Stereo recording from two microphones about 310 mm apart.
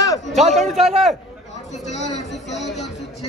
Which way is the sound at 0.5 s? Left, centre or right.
Centre.